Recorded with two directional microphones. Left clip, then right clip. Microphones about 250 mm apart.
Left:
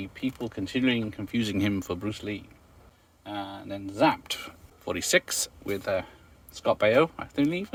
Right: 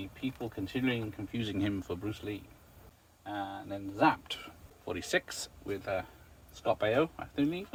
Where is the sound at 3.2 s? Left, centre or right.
Left.